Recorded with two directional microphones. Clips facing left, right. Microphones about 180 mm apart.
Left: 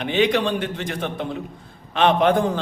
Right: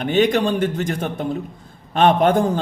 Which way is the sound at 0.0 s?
45° right (ahead or behind).